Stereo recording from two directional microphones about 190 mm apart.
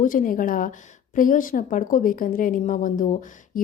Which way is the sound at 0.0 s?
45° left (ahead or behind).